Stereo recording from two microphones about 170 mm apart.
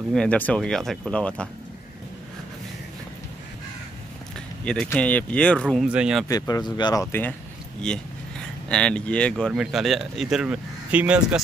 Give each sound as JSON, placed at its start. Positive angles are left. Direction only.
{"t": 0.1, "sound": "speech", "side_deg": 5}
{"t": 4.8, "sound": "speech", "side_deg": 10}
{"t": 6.2, "sound": "speech", "side_deg": 20}